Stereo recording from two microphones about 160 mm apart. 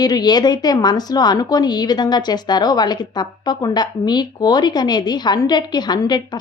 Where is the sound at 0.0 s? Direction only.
25° left (ahead or behind).